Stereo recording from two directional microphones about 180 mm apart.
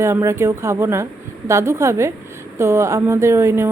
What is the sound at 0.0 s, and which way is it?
Speech, 15° right (ahead or behind).